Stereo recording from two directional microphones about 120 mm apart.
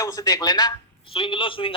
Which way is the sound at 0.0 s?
30° left (ahead or behind).